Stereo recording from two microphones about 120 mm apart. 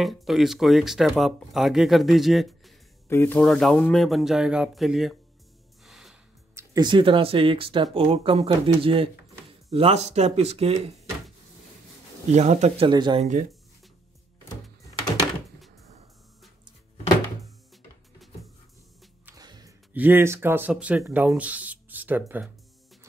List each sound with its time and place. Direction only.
0.0 s speech: centre (ahead or behind)
3.1 s speech: 20° left (ahead or behind)
3.4 s speech: 5° left (ahead or behind)
5.9 s music: centre (ahead or behind)
6.5 s speech: 35° right (ahead or behind); by 11.0 s 55° right (ahead or behind)
12.3 s speech: 70° right (ahead or behind)
12.8 s speech: 40° right (ahead or behind)
13.2 s speech: 90° right
19.3 s a sound: 30° right (ahead or behind)
19.9 s speech: 15° right (ahead or behind)